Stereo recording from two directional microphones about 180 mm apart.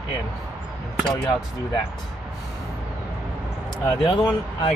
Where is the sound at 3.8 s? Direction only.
25° left (ahead or behind).